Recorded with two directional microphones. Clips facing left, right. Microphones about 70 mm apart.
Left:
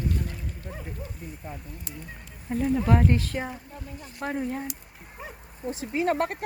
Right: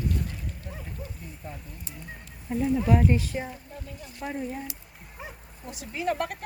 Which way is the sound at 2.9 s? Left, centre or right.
Left.